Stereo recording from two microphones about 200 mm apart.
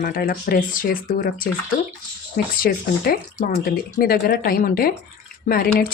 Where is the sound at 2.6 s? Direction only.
50° left (ahead or behind).